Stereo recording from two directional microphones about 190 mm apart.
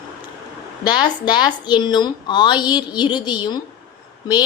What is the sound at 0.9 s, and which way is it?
Speech, 25° left (ahead or behind).